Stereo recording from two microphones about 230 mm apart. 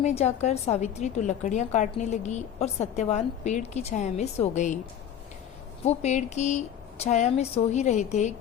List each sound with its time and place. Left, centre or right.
0.0 s a woman's voice: left
5.8 s a woman's voice: left